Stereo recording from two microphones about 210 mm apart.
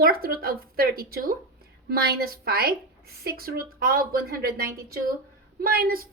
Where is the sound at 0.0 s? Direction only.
45° right (ahead or behind).